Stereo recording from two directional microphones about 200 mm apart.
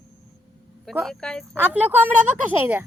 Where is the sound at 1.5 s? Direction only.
10° right (ahead or behind).